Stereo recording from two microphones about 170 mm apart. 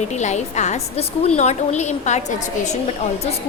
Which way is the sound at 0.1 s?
40° left (ahead or behind).